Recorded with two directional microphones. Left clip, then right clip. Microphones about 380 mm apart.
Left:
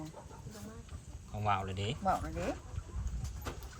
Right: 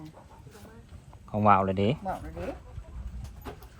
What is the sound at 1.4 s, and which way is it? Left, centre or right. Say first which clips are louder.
Speech: right 12 dB; centre.